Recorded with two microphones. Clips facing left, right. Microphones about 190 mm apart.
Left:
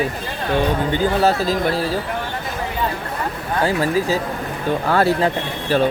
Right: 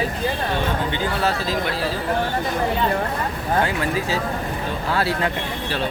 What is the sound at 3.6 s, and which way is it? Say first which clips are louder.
Speech: left 5 dB; 35° left (ahead or behind).